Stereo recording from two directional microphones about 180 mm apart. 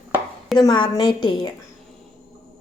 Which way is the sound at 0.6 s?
25° left (ahead or behind).